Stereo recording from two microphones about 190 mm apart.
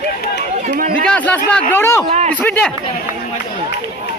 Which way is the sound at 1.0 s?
5° left (ahead or behind).